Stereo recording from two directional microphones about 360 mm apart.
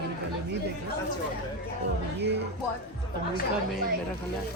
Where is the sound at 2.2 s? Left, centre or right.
Right.